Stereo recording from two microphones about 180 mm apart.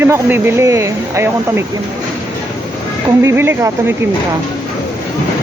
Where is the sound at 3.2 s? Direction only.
15° right (ahead or behind).